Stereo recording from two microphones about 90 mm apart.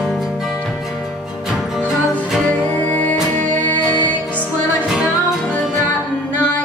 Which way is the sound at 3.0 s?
15° left (ahead or behind).